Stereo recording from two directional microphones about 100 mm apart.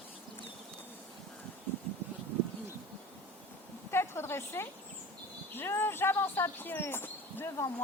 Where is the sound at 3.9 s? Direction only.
25° left (ahead or behind).